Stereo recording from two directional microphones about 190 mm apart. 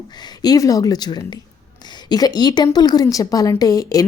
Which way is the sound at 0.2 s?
20° left (ahead or behind).